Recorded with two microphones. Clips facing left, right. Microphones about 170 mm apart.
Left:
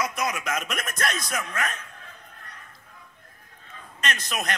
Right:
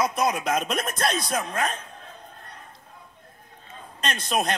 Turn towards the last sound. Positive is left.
turn(degrees=-30)  # may be behind; listen again after turning